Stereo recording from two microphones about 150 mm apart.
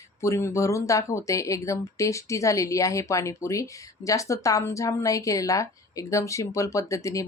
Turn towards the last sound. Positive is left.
turn(degrees=20)  # may be behind; listen again after turning